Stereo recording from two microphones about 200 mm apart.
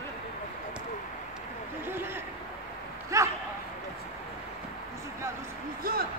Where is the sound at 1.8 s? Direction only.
10° right (ahead or behind).